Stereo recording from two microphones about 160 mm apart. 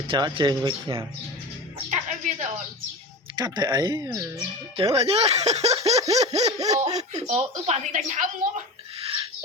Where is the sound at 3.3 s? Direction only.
25° right (ahead or behind).